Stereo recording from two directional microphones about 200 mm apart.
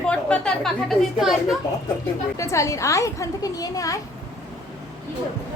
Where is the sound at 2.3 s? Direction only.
15° left (ahead or behind).